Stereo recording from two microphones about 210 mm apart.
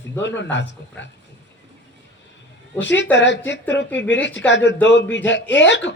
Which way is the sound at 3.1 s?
60° left (ahead or behind).